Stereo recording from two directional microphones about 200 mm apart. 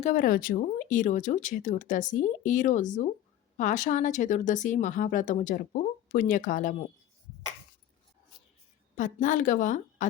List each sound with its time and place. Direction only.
0.0 s speech: 40° left (ahead or behind)
9.0 s speech: 40° left (ahead or behind)